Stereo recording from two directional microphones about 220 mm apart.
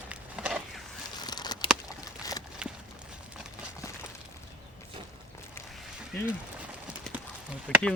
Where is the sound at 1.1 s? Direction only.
20° left (ahead or behind).